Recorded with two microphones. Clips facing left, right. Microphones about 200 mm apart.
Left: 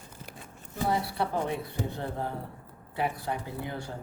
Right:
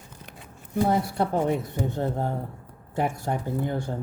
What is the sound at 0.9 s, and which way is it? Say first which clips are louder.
Speech: right 3 dB; 45° right (ahead or behind).